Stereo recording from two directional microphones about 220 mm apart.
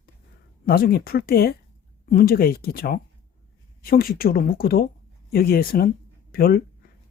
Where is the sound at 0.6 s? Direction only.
45° left (ahead or behind).